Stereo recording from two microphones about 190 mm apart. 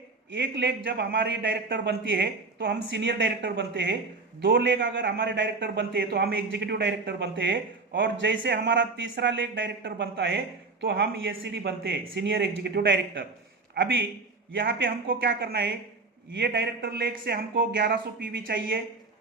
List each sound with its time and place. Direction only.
0.3 s a man's voice: 70° right (ahead or behind)
15.2 s a man's voice: 65° right (ahead or behind)